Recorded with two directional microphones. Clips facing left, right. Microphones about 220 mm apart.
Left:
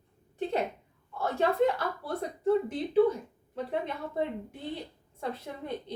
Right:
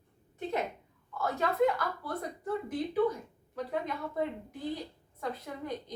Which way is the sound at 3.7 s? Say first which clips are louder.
Left 1 dB; 25° left (ahead or behind).